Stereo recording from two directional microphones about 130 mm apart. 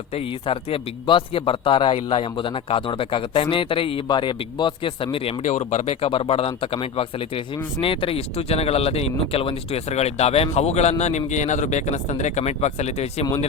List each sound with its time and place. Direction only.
0.4 s speech: 45° left (ahead or behind)
5.4 s speech: 60° left (ahead or behind)